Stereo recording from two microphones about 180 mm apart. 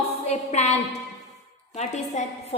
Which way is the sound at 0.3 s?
40° left (ahead or behind).